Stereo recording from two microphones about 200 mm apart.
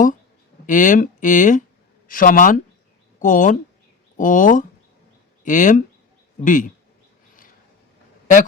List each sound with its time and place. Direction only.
0.7 s speech: 40° left (ahead or behind)